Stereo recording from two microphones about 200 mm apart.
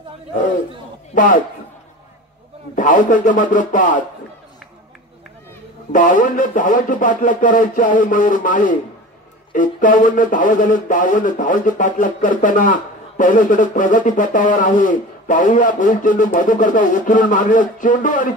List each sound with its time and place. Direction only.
1.1 s a man's voice: 40° left (ahead or behind)
2.7 s speech: 40° left (ahead or behind)
5.9 s speech: 40° left (ahead or behind)